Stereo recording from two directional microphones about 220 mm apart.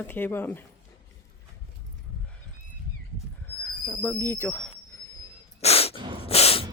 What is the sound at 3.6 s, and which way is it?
Speech, 5° left (ahead or behind).